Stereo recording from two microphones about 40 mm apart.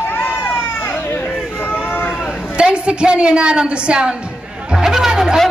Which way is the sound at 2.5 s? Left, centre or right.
Right.